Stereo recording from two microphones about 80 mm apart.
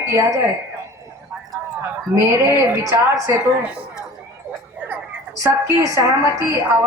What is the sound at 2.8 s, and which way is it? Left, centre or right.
Speech, right.